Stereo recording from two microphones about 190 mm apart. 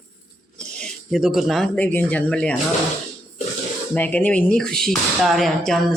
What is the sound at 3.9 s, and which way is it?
Speech, 10° left (ahead or behind).